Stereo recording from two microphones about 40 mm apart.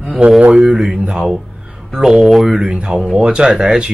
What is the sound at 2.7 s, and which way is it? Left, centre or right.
Speech, right.